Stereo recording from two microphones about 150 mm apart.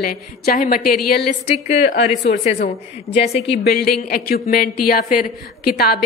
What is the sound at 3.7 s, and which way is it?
A man's voice, 90° left.